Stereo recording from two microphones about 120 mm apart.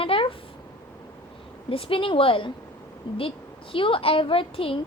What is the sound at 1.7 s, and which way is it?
A woman's voice, 50° left (ahead or behind).